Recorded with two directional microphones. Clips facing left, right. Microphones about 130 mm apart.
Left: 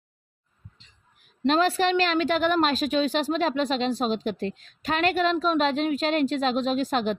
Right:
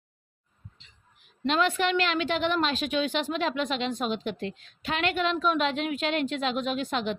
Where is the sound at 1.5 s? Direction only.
35° left (ahead or behind).